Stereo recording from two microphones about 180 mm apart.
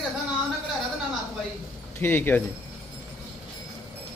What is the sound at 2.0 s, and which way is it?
Speech, 10° left (ahead or behind).